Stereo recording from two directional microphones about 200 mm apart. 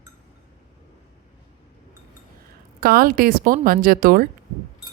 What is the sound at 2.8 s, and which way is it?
A woman's voice, 50° right (ahead or behind).